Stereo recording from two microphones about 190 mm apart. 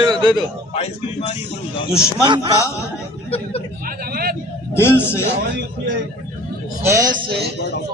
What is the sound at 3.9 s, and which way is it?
Vehicle, 50° right (ahead or behind).